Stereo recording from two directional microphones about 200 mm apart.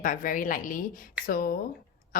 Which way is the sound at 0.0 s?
40° left (ahead or behind).